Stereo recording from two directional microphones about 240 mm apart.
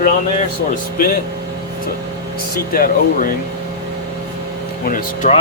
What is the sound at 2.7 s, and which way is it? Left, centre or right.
Speech, left.